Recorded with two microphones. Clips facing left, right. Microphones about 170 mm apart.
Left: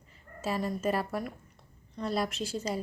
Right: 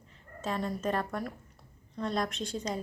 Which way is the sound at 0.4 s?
5° left (ahead or behind).